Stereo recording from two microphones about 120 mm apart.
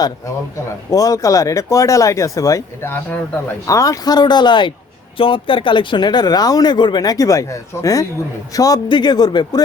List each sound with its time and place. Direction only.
0.9 s speech: 30° left (ahead or behind)